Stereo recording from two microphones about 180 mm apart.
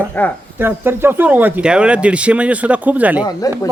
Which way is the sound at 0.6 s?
10° right (ahead or behind).